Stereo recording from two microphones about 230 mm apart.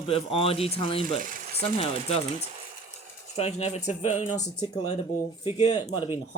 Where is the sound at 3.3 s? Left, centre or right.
Left.